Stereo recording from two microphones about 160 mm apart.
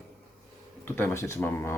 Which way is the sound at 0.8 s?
15° left (ahead or behind).